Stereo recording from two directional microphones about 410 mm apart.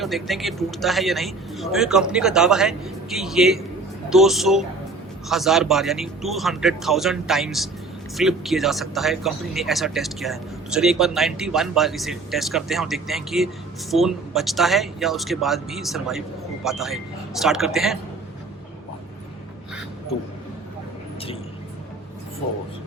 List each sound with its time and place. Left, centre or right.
0.0 s speech: centre